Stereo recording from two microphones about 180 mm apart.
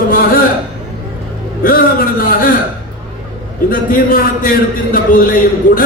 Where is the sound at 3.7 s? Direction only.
50° left (ahead or behind).